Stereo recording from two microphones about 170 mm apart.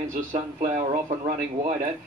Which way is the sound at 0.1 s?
55° right (ahead or behind).